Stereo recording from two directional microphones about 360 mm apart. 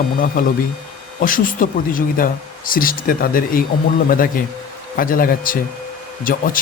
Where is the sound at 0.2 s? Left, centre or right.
Left.